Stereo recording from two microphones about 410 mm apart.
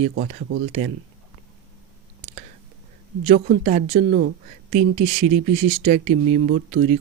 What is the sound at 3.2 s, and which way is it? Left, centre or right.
Speech, centre.